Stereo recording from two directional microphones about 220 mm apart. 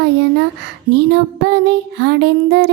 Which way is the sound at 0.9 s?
50° right (ahead or behind).